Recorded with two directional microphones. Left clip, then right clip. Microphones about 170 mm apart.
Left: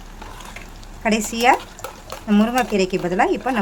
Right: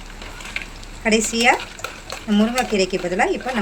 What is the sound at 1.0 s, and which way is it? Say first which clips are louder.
Speech: even; 65° left (ahead or behind).